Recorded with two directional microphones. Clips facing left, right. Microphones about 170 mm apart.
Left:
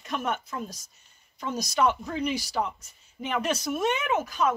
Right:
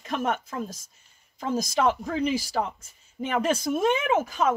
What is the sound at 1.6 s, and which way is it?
Speech, 90° right.